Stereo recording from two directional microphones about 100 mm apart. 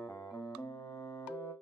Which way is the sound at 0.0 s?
30° left (ahead or behind).